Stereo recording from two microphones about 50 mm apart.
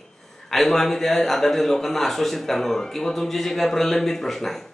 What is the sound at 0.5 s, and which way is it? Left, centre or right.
A man's voice, centre.